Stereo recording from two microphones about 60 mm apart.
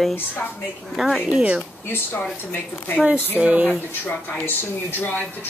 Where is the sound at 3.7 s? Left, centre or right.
Left.